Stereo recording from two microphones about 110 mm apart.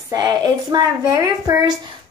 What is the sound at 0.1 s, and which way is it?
A child's voice, 40° right (ahead or behind).